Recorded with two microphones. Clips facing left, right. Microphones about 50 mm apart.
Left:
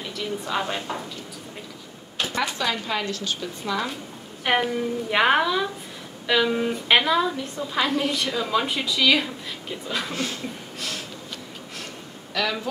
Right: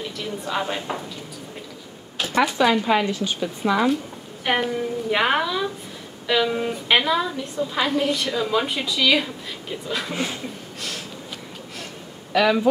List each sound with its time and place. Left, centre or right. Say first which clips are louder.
0.2 s a woman's voice: even; centre
2.5 s speech: right 8 dB; centre
4.5 s a woman's voice: even; centre
10.1 s speech: right 2 dB; centre
12.3 s speech: right 8 dB; centre